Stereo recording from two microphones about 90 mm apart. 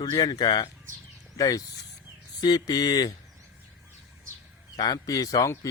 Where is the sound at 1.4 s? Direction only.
40° left (ahead or behind).